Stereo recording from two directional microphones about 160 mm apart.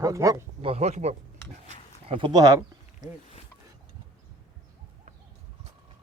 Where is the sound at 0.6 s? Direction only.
40° right (ahead or behind).